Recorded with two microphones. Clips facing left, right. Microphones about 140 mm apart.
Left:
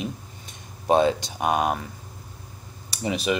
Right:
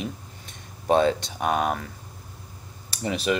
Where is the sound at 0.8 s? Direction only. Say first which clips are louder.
Left 1 dB; 10° left (ahead or behind).